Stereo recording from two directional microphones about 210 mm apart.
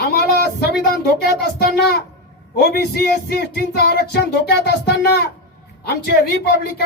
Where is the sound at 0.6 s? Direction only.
50° left (ahead or behind).